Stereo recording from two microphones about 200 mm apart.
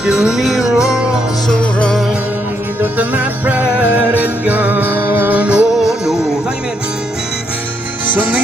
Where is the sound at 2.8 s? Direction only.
10° right (ahead or behind).